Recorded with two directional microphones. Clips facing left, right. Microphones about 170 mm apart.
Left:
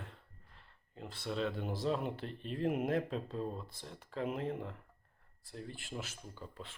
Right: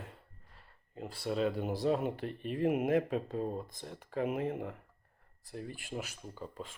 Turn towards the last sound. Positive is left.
turn(degrees=-45)  # may be behind; listen again after turning